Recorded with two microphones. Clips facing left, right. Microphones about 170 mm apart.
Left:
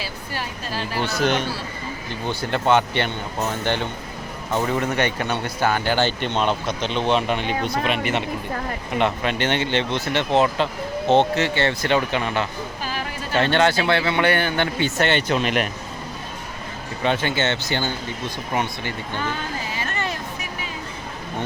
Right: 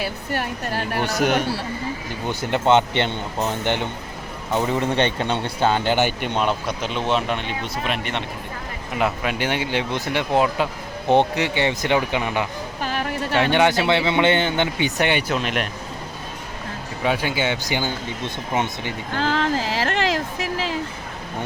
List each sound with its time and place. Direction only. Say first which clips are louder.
0.0 s a woman's voice: right 5 dB; 60° right (ahead or behind)
1.0 s speech: right 1 dB; 15° right (ahead or behind)
12.8 s a sound: right 7 dB; 60° right (ahead or behind)
13.4 s speech: even; 15° right (ahead or behind)
15.3 s speech: left 2 dB; centre (ahead or behind)
17.0 s speech: even; 5° right (ahead or behind)
19.1 s a sound: right 9 dB; 90° right